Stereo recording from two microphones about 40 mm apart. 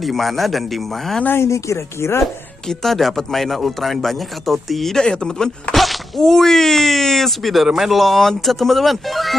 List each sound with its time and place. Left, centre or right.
0.0 s speech: centre
2.0 s speech: left
2.7 s speech: centre
4.9 s speech: centre
5.8 s speech: centre